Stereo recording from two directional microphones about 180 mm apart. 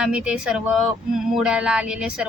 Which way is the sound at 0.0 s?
5° right (ahead or behind).